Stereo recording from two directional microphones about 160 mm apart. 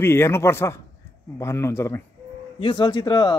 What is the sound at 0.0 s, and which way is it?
Speech, 15° left (ahead or behind).